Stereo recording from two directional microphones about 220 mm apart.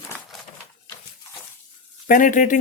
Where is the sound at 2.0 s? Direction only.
40° left (ahead or behind).